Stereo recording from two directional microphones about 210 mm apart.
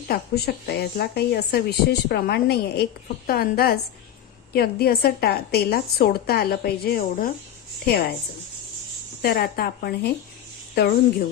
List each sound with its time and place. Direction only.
0.1 s a woman's voice: 50° left (ahead or behind)
9.2 s a woman's voice: 50° left (ahead or behind)